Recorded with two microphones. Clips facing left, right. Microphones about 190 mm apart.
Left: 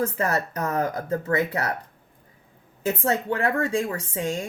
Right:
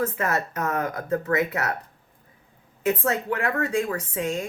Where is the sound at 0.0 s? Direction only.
35° left (ahead or behind).